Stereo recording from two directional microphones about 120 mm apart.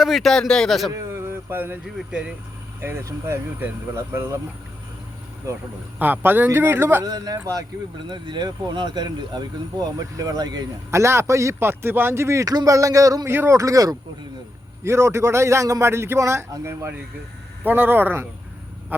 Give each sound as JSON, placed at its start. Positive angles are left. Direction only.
{"t": 0.0, "sound": "speech", "side_deg": 0}
{"t": 0.9, "sound": "a sound", "side_deg": -20}
{"t": 2.0, "sound": "speech", "side_deg": -10}
{"t": 2.8, "sound": "speech", "side_deg": -20}
{"t": 6.0, "sound": "speech", "side_deg": -15}
{"t": 7.0, "sound": "speech", "side_deg": -35}
{"t": 7.9, "sound": "speech", "side_deg": -40}
{"t": 11.0, "sound": "speech", "side_deg": -20}